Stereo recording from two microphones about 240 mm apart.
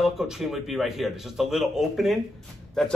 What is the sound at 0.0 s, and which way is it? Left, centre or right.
Speech, centre.